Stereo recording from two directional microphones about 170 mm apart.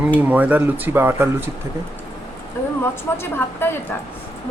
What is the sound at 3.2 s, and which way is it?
Speech, 15° left (ahead or behind).